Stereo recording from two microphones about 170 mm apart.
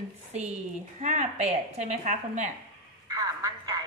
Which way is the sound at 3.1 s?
20° right (ahead or behind).